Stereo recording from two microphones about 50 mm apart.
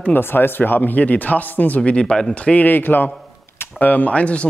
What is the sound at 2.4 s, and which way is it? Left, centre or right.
Speech, left.